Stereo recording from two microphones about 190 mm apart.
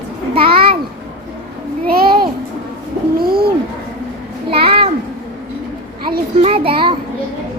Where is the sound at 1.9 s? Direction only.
50° right (ahead or behind).